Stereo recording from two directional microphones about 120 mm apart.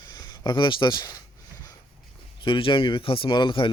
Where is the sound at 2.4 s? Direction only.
45° left (ahead or behind).